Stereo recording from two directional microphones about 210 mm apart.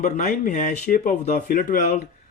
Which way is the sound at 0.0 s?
35° left (ahead or behind).